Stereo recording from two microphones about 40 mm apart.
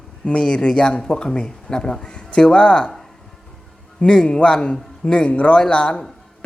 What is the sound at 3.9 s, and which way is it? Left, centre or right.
Speech, left.